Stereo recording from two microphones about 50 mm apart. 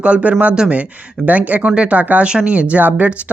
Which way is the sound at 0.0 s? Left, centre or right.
Right.